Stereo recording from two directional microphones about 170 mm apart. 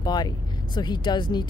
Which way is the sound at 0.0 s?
25° left (ahead or behind).